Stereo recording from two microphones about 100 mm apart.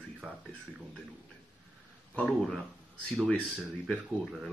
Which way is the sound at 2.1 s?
5° left (ahead or behind).